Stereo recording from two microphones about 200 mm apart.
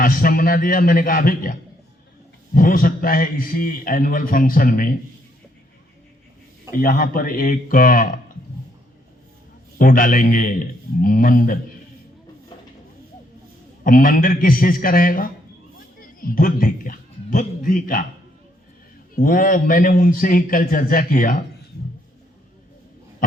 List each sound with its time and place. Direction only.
0.0 s a man's voice: 45° left (ahead or behind)
6.7 s a man's voice: 45° left (ahead or behind)
9.7 s a man's voice: 45° left (ahead or behind)
13.8 s a man's voice: 45° left (ahead or behind)
19.1 s a man's voice: 45° left (ahead or behind)